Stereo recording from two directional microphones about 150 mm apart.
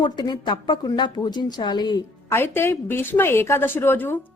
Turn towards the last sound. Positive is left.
turn(degrees=15)  # may be behind; listen again after turning